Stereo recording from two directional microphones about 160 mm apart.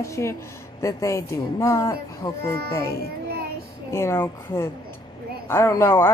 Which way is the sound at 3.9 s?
15° left (ahead or behind).